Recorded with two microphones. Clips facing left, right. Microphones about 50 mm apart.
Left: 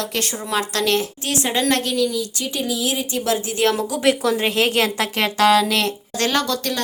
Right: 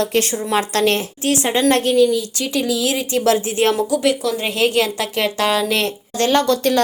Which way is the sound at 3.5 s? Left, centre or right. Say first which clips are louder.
Right 2 dB; right.